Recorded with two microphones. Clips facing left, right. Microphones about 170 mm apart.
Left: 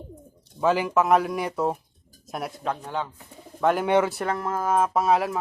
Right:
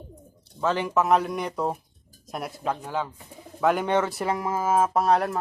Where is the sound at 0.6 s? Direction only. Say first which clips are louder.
Left 2 dB; 10° left (ahead or behind).